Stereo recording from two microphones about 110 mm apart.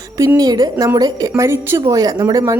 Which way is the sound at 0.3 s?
35° right (ahead or behind).